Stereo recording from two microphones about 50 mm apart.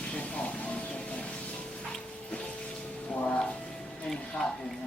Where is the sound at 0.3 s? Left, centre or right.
Left.